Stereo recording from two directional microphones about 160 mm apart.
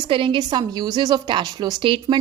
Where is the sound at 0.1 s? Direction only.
35° right (ahead or behind).